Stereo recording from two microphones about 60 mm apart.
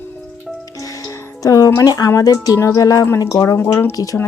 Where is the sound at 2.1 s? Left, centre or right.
Left.